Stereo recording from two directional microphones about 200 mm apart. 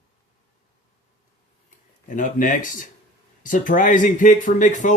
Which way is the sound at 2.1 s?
40° left (ahead or behind).